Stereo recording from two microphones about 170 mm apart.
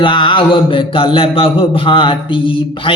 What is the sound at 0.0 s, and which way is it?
Speech, 30° left (ahead or behind).